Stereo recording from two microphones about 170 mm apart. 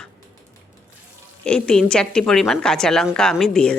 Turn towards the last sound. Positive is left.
turn(degrees=5)  # may be behind; listen again after turning